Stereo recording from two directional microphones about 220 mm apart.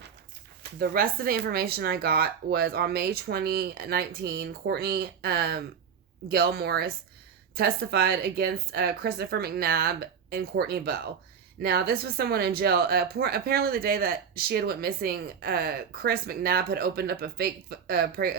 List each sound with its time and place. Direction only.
0.8 s speech: 40° right (ahead or behind)